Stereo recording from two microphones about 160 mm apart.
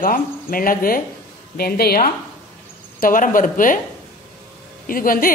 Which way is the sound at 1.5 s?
75° left (ahead or behind).